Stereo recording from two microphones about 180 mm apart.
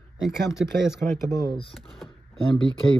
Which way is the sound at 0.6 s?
5° right (ahead or behind).